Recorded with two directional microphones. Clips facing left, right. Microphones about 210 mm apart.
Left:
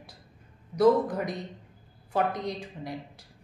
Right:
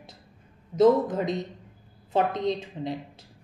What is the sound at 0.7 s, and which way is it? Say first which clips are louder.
A woman's voice: right 2 dB; 20° right (ahead or behind).